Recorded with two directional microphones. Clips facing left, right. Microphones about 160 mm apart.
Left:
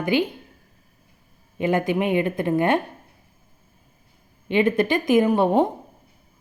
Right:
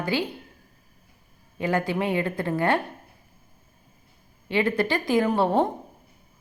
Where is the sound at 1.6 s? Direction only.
20° left (ahead or behind).